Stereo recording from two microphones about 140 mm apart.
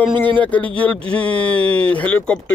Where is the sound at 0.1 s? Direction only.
35° right (ahead or behind).